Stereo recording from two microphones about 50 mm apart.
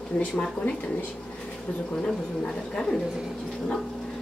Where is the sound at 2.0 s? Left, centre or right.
Centre.